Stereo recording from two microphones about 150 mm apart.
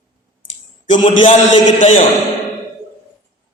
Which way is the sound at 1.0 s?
35° left (ahead or behind).